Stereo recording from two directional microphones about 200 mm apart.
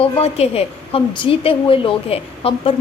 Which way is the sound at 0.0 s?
30° left (ahead or behind).